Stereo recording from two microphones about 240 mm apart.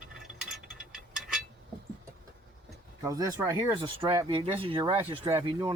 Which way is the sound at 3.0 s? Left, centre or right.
Centre.